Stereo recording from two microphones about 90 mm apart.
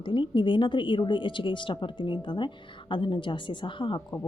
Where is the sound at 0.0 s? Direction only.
65° left (ahead or behind).